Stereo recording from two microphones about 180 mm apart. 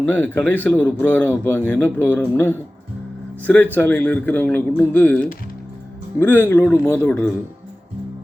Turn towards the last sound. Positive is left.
turn(degrees=10)  # may be behind; listen again after turning